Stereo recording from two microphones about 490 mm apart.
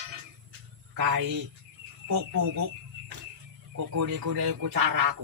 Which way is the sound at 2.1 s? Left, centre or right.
Right.